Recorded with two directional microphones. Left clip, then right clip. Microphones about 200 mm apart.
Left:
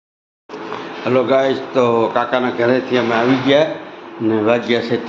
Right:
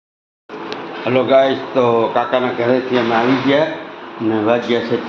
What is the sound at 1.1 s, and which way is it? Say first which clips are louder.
Speech: right 2 dB; 15° left (ahead or behind).